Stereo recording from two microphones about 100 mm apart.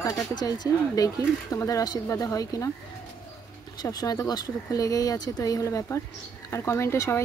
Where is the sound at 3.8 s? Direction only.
40° left (ahead or behind).